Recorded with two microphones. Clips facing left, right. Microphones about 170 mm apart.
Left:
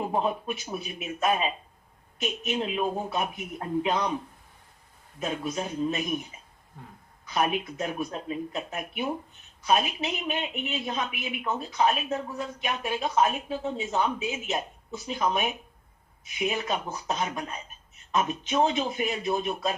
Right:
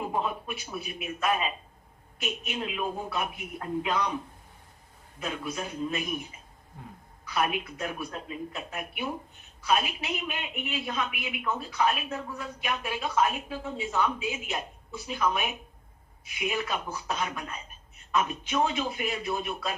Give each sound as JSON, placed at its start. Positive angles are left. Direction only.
{"t": 0.1, "sound": "speech", "side_deg": 25}
{"t": 5.2, "sound": "speech", "side_deg": 25}
{"t": 7.3, "sound": "speech", "side_deg": 25}